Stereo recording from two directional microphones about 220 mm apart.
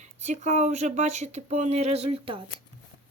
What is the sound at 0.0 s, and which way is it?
Speech, 30° right (ahead or behind).